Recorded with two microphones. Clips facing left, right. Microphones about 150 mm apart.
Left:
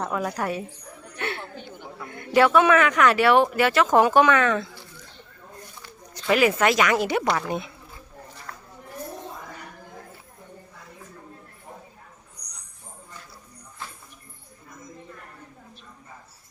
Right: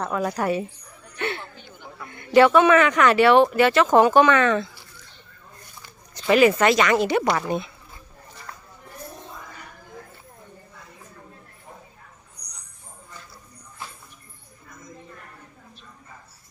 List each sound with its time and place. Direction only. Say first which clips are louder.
0.2 s speech: right 4 dB; centre (ahead or behind)
1.2 s a sound: right 2 dB; 5° left (ahead or behind)
2.0 s speech: right 4 dB; centre (ahead or behind)
5.8 s speech: right 4 dB; centre (ahead or behind)
7.3 s speech: right 2 dB; 5° right (ahead or behind)
8.5 s a sound: right 1 dB; centre (ahead or behind)